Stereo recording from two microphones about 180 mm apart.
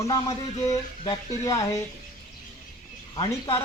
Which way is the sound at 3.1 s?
30° left (ahead or behind).